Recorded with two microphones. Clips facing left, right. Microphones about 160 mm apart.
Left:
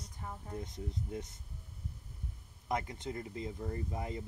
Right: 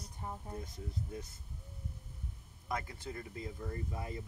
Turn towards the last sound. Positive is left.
turn(degrees=25)  # may be behind; listen again after turning